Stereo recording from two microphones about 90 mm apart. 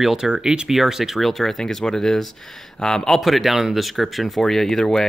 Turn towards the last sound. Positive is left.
turn(degrees=5)  # may be behind; listen again after turning